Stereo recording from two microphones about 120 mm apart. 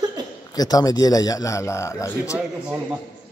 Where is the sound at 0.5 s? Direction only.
30° left (ahead or behind).